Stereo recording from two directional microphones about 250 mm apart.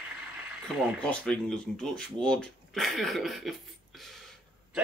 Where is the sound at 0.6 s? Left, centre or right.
Centre.